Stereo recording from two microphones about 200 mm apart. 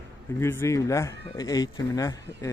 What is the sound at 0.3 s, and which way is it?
Speech, 15° left (ahead or behind).